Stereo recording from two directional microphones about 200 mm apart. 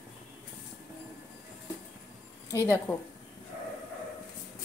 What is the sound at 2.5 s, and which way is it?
Speech, 15° left (ahead or behind).